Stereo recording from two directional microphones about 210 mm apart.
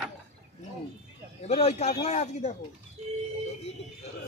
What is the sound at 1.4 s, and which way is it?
Speech, 30° left (ahead or behind).